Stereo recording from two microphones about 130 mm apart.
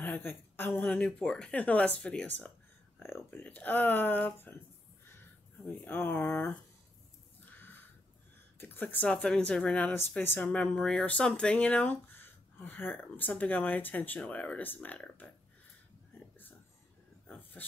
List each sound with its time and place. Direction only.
0.0 s speech: 15° left (ahead or behind)
5.7 s speech: 15° left (ahead or behind)
7.4 s a sound: 15° left (ahead or behind)
8.5 s speech: 15° left (ahead or behind)